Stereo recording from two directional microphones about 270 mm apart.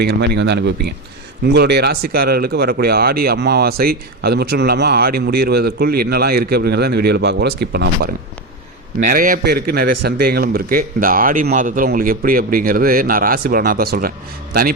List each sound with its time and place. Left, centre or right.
0.0 s speech: right